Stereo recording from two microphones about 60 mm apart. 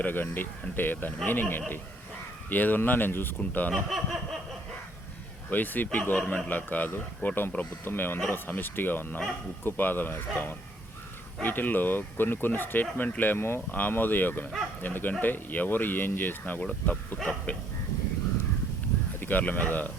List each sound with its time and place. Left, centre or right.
0.0 s speech: left
3.8 s a sound: centre
5.5 s speech: left
19.2 s speech: left